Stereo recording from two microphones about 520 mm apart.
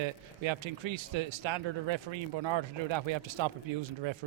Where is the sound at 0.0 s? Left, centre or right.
Right.